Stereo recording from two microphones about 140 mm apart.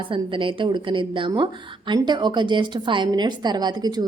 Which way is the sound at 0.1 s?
35° right (ahead or behind).